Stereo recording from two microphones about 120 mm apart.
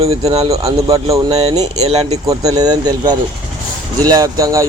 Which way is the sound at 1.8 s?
60° right (ahead or behind).